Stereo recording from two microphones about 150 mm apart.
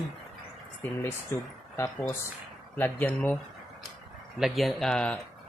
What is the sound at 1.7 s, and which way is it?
Speech, 15° left (ahead or behind).